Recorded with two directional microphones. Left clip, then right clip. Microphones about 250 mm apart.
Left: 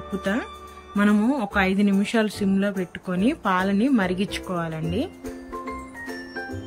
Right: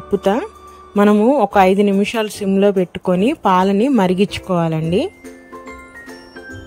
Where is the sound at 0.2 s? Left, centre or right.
Centre.